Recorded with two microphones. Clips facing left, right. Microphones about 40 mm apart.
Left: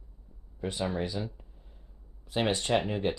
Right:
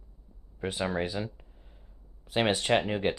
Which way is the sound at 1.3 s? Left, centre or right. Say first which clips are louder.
Even; right.